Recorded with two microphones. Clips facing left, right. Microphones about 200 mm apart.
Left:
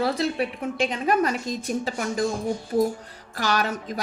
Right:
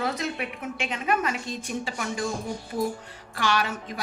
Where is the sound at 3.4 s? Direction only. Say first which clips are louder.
Left 2 dB; 40° left (ahead or behind).